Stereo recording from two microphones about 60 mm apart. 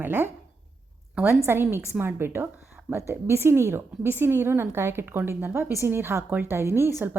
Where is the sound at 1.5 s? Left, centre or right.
Right.